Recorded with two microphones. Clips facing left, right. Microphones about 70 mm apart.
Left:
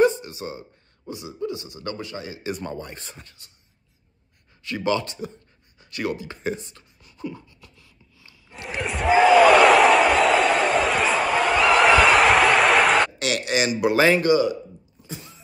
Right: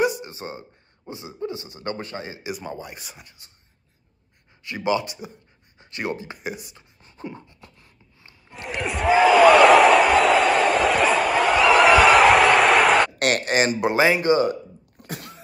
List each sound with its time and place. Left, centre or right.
0.2 s speech: right
2.4 s speech: centre
4.6 s speech: centre
7.0 s a sound: right
8.6 s a sound: centre
13.2 s speech: right
15.0 s sneeze: right